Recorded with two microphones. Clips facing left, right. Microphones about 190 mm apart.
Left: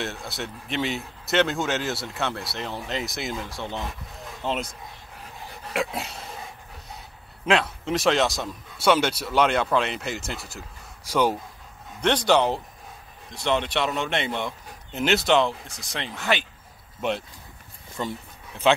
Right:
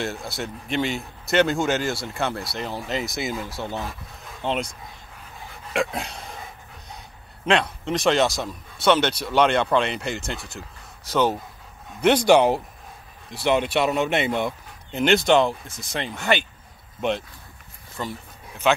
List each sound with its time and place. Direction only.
0.0 s speech: centre (ahead or behind)
7.4 s speech: 5° left (ahead or behind)
12.0 s speech: 10° right (ahead or behind)
14.9 s speech: 5° left (ahead or behind)
18.0 s speech: 20° left (ahead or behind)
18.6 s speech: 30° left (ahead or behind)